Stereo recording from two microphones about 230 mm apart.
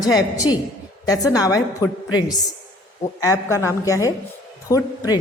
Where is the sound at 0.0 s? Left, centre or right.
Centre.